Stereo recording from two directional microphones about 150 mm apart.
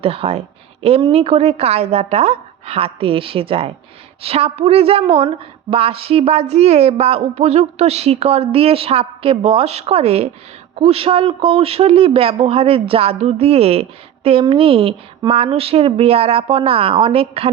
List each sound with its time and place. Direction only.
0.0 s a woman's voice: 40° right (ahead or behind)